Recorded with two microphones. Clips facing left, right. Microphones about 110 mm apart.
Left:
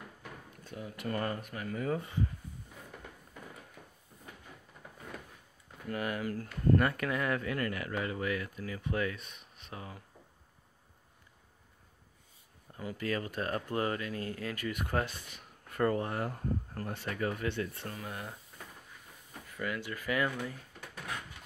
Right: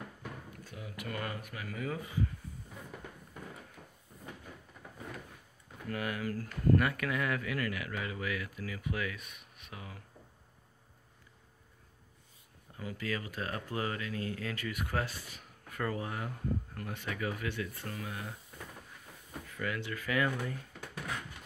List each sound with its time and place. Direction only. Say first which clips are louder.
0.7 s speech: left 5 dB; 35° left (ahead or behind)
5.9 s speech: left 1 dB; 25° left (ahead or behind)
12.7 s speech: left 3 dB; 30° left (ahead or behind)
14.6 s speech: left 4 dB; 25° left (ahead or behind)
15.7 s speech: left 6 dB; 40° left (ahead or behind)
19.5 s speech: even; 25° left (ahead or behind)